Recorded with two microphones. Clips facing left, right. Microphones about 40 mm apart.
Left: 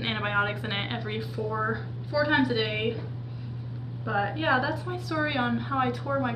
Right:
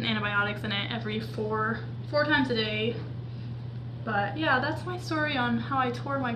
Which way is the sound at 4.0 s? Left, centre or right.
Centre.